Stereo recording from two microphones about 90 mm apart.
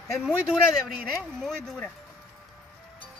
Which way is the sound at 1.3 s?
5° left (ahead or behind).